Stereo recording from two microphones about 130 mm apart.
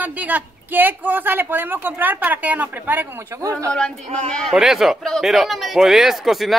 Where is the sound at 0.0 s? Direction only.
10° right (ahead or behind).